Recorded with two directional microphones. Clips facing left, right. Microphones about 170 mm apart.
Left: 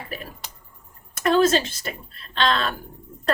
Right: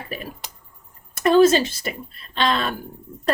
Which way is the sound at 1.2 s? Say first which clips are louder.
Right 4 dB; 15° right (ahead or behind).